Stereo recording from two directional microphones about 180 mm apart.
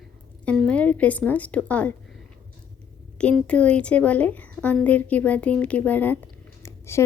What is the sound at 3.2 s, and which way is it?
Speech, 5° left (ahead or behind).